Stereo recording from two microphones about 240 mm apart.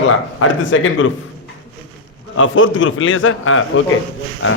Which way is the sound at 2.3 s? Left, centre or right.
Left.